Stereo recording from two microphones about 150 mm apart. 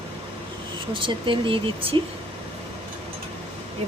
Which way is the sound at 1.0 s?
35° right (ahead or behind).